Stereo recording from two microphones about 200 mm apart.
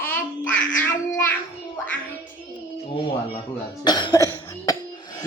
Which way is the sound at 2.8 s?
25° left (ahead or behind).